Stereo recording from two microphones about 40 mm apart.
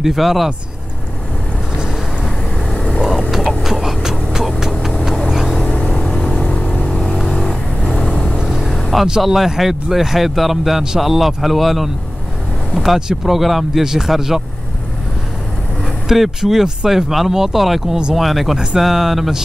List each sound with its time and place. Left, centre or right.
0.0 s speech: centre
3.6 s vehicle: centre
5.6 s vehicle: left
8.0 s vehicle: centre
8.5 s vehicle: centre
9.2 s speech: centre
16.1 s speech: centre